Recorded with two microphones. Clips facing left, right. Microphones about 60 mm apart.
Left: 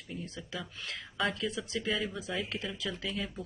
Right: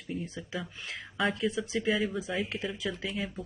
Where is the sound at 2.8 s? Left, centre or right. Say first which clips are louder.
Right 2 dB; right.